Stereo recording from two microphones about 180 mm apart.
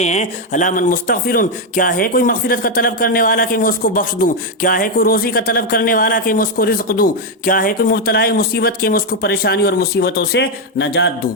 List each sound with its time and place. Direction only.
0.0 s speech: 40° left (ahead or behind); by 11.1 s 75° left (ahead or behind)